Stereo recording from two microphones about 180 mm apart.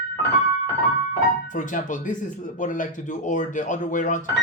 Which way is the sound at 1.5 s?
45° left (ahead or behind).